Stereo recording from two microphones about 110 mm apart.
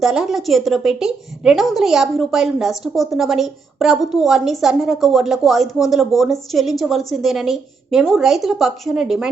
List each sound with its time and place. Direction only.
0.0 s a woman's voice: 5° right (ahead or behind)